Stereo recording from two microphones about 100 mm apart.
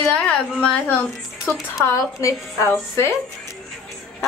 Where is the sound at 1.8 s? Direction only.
30° left (ahead or behind).